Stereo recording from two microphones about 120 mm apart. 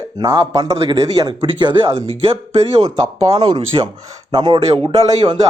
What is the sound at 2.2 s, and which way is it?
Speech, 55° right (ahead or behind).